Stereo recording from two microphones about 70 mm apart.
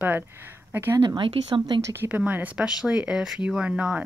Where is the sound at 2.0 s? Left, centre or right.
Right.